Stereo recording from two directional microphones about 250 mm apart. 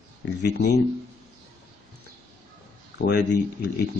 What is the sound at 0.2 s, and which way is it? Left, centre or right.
Speech, left.